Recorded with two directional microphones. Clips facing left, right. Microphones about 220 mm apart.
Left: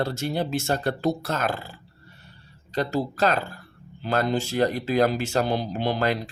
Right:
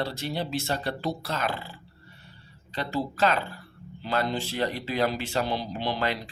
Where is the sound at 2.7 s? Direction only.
40° left (ahead or behind).